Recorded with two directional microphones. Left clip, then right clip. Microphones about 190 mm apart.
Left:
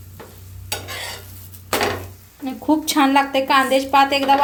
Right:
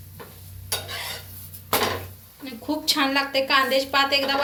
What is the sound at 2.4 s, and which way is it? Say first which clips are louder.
A woman's voice: left 5 dB; 45° left (ahead or behind).